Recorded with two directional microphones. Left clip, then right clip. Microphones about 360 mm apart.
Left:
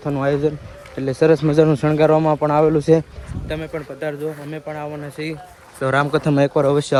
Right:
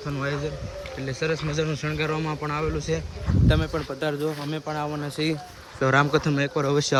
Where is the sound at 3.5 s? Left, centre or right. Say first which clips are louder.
Left 1 dB; centre.